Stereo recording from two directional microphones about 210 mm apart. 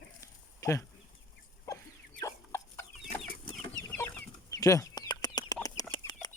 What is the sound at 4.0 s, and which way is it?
Chicken, 15° left (ahead or behind).